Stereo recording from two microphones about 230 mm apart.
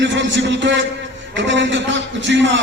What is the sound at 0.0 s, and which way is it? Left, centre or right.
A man's voice, right.